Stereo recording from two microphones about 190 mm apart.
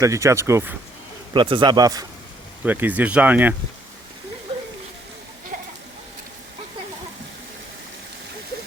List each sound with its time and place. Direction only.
0.0 s speech: 15° right (ahead or behind)
1.3 s speech: 25° right (ahead or behind)
2.6 s speech: 10° right (ahead or behind)